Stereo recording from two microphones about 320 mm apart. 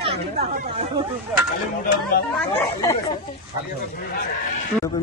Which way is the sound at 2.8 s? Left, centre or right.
Centre.